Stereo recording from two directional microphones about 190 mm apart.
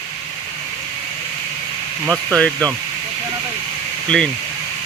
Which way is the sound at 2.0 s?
5° left (ahead or behind).